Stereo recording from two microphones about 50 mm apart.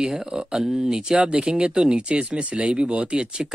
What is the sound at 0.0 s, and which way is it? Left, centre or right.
A man's voice, centre.